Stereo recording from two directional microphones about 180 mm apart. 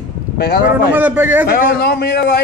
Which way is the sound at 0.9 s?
10° right (ahead or behind).